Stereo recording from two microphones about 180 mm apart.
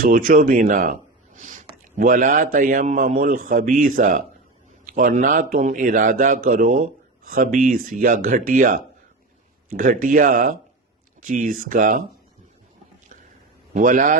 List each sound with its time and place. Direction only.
0.0 s a man's voice: 50° right (ahead or behind)
13.7 s a man's voice: 45° right (ahead or behind)